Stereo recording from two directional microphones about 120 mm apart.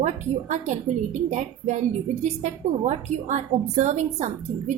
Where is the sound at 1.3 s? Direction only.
75° right (ahead or behind).